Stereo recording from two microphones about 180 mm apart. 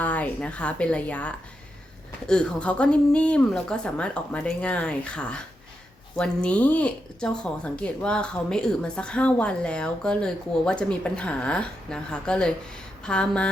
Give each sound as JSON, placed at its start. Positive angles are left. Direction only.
{"t": 0.0, "sound": "speech", "side_deg": 10}